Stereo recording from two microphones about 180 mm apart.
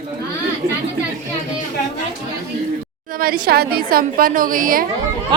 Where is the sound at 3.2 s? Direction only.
55° right (ahead or behind).